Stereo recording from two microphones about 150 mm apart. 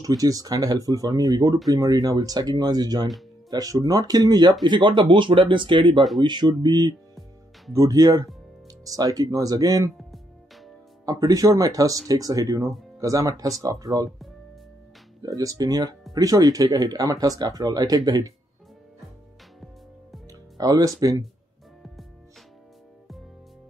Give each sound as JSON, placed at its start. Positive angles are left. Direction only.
{"t": 0.0, "sound": "a man's voice", "side_deg": -25}
{"t": 9.9, "sound": "music", "side_deg": 0}
{"t": 11.1, "sound": "speech", "side_deg": -25}
{"t": 15.2, "sound": "speech", "side_deg": -25}
{"t": 20.2, "sound": "music", "side_deg": -25}
{"t": 21.0, "sound": "speech", "side_deg": -20}